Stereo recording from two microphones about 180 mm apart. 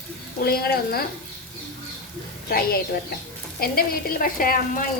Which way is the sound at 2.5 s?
55° left (ahead or behind).